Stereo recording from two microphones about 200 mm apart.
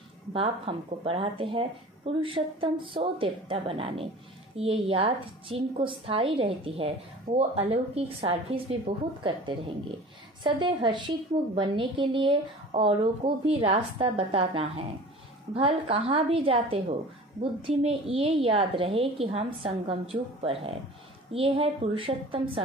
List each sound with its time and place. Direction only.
0.3 s a woman's voice: 25° right (ahead or behind)
10.4 s a woman's voice: 25° right (ahead or behind)